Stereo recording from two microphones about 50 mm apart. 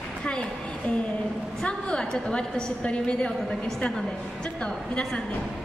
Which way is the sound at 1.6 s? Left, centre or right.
Centre.